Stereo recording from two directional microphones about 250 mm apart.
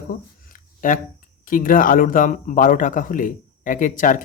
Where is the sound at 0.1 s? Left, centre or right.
Left.